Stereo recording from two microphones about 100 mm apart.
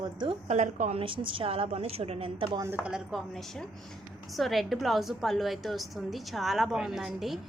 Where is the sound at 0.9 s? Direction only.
65° right (ahead or behind); by 2.5 s 85° right.